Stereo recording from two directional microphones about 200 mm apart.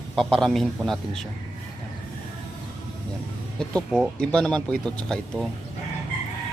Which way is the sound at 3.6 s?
Centre (ahead or behind).